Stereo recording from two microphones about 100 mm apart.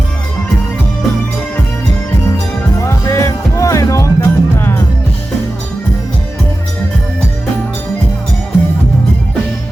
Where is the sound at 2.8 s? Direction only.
30° left (ahead or behind).